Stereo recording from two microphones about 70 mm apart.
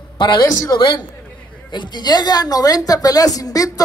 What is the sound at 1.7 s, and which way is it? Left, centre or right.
A woman's voice, left.